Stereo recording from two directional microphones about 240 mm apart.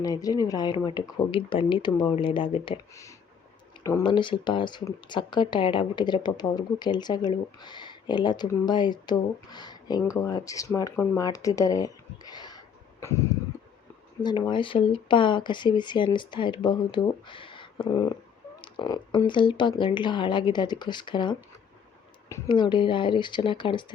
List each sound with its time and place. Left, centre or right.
0.0 s speech: centre